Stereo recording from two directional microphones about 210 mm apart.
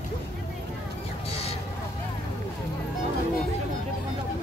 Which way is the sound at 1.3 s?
30° left (ahead or behind).